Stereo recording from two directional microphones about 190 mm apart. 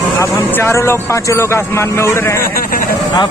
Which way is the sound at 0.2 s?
10° left (ahead or behind).